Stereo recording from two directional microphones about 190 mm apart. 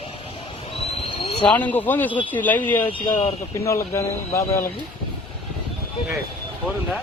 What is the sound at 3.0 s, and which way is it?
Speech, 35° left (ahead or behind).